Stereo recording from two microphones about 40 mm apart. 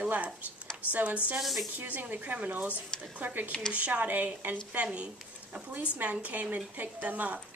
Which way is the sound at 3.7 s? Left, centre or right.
Right.